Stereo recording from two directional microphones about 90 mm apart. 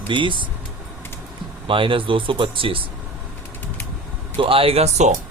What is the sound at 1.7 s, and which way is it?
Speech, 75° right (ahead or behind).